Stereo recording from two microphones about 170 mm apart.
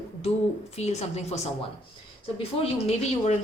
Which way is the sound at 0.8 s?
40° left (ahead or behind).